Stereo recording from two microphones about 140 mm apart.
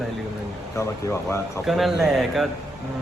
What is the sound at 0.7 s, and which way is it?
Speech, 20° left (ahead or behind).